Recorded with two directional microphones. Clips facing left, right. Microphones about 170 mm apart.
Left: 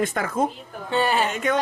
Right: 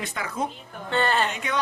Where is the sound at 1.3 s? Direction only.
45° left (ahead or behind).